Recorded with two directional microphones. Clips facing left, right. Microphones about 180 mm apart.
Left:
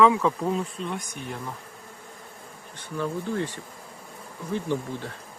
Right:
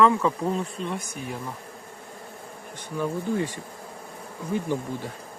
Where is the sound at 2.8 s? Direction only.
10° right (ahead or behind).